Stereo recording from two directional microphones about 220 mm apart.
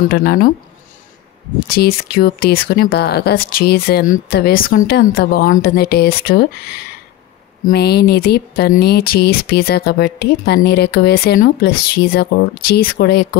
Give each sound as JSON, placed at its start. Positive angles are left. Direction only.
{"t": 0.0, "sound": "speech", "side_deg": 45}
{"t": 1.7, "sound": "speech", "side_deg": 45}